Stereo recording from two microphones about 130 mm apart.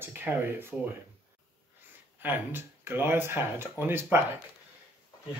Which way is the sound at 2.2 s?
15° right (ahead or behind).